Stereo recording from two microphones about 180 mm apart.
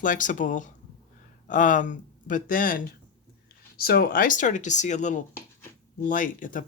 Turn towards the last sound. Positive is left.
turn(degrees=45)  # may be behind; listen again after turning